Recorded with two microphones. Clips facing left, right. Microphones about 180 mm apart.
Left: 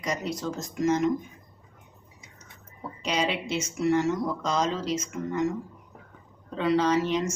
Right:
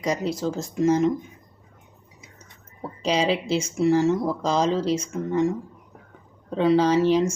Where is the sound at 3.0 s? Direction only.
30° right (ahead or behind).